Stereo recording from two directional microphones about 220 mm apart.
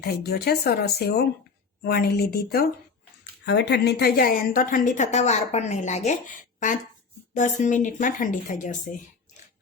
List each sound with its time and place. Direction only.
0.2 s a woman's voice: 45° left (ahead or behind)